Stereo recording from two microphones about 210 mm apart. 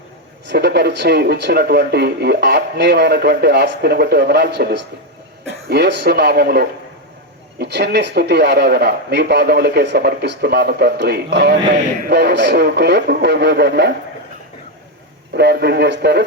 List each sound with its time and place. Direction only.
0.4 s speech: 50° right (ahead or behind)
15.3 s speech: 50° right (ahead or behind)